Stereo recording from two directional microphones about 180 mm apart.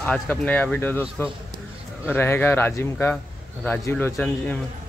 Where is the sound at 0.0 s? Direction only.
5° left (ahead or behind).